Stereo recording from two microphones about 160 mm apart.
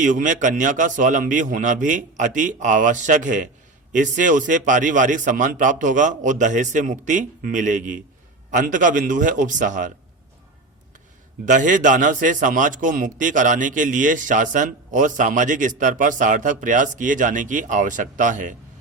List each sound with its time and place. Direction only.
0.0 s a man's voice: 55° right (ahead or behind)
11.4 s a man's voice: 50° right (ahead or behind)